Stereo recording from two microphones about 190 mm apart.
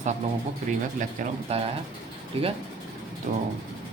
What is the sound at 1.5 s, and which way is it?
Speech, 30° right (ahead or behind).